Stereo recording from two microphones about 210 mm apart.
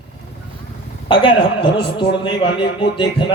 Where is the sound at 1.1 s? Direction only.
20° left (ahead or behind).